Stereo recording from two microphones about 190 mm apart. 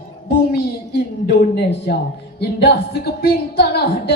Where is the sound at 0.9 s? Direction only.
55° left (ahead or behind).